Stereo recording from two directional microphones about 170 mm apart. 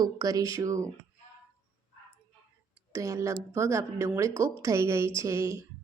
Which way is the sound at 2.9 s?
15° right (ahead or behind).